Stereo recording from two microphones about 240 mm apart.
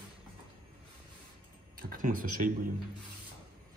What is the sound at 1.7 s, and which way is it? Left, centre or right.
Speech, right.